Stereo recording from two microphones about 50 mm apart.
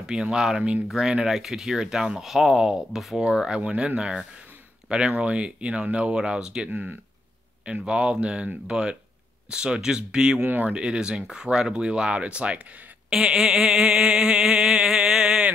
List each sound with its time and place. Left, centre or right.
0.0 s speech: centre
3.3 s speech: centre
6.7 s speech: right
7.6 s speech: right
10.4 s speech: right
10.7 s speech: centre
13.1 s a sound: centre